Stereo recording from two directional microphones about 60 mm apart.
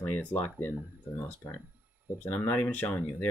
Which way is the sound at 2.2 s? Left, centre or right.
Left.